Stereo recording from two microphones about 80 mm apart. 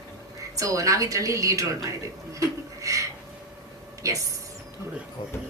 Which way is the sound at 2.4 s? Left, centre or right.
Right.